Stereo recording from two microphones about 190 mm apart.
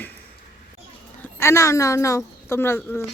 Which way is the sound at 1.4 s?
15° left (ahead or behind).